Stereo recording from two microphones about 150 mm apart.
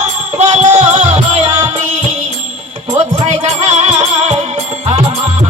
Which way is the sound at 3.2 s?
50° right (ahead or behind).